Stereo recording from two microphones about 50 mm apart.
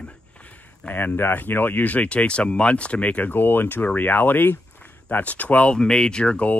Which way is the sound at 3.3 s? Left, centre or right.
Left.